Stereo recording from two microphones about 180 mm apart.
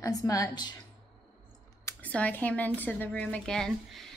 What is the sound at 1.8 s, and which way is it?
A woman's voice, 10° left (ahead or behind).